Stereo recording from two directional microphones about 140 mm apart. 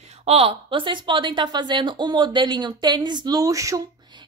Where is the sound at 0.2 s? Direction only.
45° right (ahead or behind); by 3.8 s 25° right (ahead or behind).